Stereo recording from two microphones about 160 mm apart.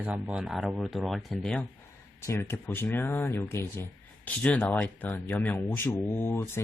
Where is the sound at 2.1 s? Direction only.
15° left (ahead or behind).